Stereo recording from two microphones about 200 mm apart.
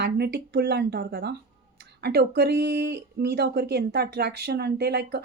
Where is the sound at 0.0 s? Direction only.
55° right (ahead or behind).